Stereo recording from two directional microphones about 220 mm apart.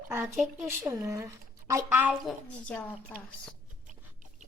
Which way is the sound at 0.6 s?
10° right (ahead or behind).